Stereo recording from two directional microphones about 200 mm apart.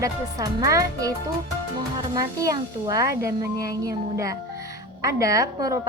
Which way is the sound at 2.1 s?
15° right (ahead or behind).